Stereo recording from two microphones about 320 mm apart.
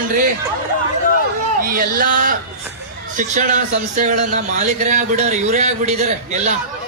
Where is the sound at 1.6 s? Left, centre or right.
Right.